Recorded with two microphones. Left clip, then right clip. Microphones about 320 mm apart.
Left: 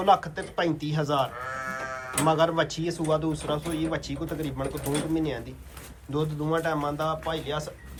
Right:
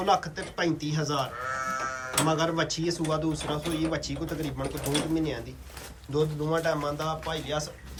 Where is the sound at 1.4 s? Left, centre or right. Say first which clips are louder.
Right 2 dB; left.